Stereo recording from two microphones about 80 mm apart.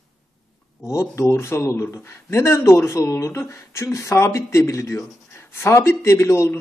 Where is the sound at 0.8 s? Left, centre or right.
Left.